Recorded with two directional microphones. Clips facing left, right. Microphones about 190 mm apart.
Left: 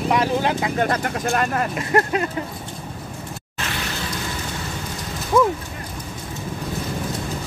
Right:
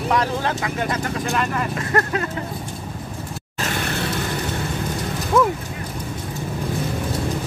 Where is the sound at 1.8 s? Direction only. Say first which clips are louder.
Left 3 dB; 20° left (ahead or behind).